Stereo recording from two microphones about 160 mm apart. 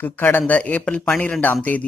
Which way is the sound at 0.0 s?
10° left (ahead or behind).